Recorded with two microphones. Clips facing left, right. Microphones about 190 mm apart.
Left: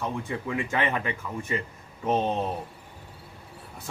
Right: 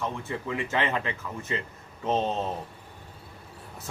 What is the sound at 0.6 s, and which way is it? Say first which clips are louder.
Speech: right 1 dB; 15° left (ahead or behind).